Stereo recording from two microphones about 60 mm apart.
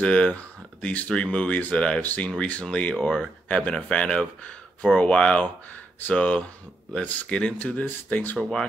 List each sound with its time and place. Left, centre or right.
0.0 s speech: centre
2.7 s speech: centre
3.4 s speech: left
8.4 s speech: centre